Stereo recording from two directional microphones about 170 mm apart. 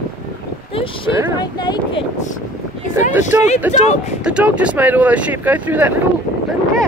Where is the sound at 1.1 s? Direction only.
15° right (ahead or behind).